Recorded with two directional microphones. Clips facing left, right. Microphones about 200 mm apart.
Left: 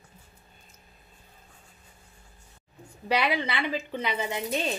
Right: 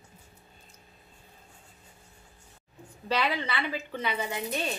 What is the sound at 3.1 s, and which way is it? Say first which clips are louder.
A woman's voice: left 3 dB; 15° left (ahead or behind).